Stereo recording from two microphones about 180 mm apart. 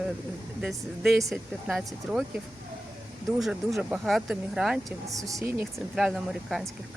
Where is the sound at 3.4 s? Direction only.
5° right (ahead or behind).